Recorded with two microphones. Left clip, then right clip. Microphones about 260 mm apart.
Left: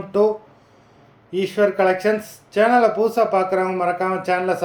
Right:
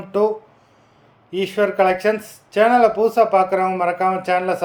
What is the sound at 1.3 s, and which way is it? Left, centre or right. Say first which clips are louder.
Speech: left 1 dB; centre.